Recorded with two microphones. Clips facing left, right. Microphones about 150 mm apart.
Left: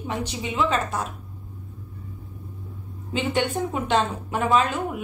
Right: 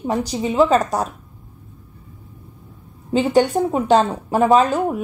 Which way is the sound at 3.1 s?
40° right (ahead or behind).